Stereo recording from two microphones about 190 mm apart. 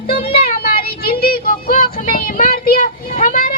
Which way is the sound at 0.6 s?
50° left (ahead or behind).